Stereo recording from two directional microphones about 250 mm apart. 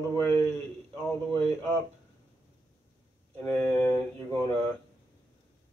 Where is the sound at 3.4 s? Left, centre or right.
Centre.